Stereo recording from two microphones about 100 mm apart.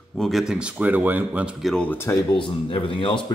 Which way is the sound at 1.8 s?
20° left (ahead or behind).